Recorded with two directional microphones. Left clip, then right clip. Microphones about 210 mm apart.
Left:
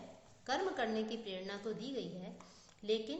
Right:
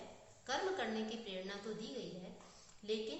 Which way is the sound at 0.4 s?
50° left (ahead or behind).